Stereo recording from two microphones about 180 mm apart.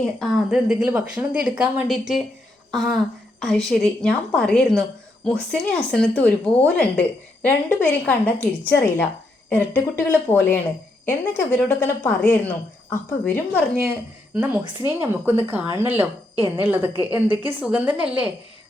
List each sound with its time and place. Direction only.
0.0 s a woman's voice: centre (ahead or behind)
15.0 s speech: 10° right (ahead or behind)
16.9 s a woman's voice: 25° left (ahead or behind)
17.4 s speech: 10° right (ahead or behind)